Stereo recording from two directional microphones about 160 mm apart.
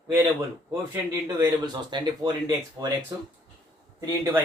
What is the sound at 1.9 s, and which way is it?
A man's voice, 25° right (ahead or behind).